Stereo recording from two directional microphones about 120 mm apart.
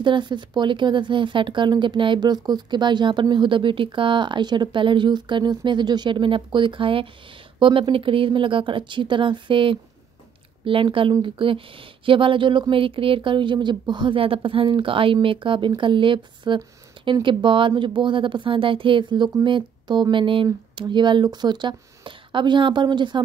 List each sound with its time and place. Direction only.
0.0 s speech: 40° right (ahead or behind)